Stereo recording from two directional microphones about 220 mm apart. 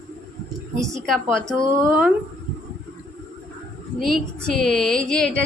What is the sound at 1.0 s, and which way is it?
Speech, centre (ahead or behind).